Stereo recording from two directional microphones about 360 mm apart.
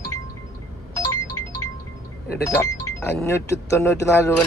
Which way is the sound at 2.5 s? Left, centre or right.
Centre.